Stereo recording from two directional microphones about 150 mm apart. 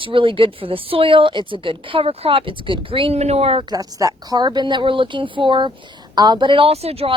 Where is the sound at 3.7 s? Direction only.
25° right (ahead or behind).